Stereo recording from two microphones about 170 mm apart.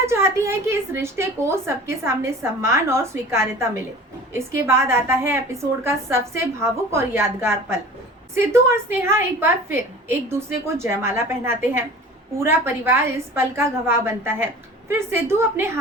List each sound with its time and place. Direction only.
0.0 s speech: 15° right (ahead or behind)